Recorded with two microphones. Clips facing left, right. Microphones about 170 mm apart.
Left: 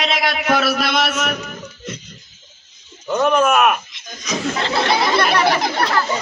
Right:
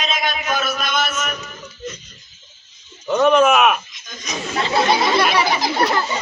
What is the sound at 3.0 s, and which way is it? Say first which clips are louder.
Speech: right 2 dB; 5° left (ahead or behind).